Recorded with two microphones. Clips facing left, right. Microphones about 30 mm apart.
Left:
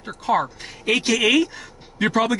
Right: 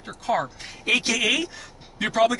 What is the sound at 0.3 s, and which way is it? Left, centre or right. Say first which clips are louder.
Speech: left 4 dB; centre.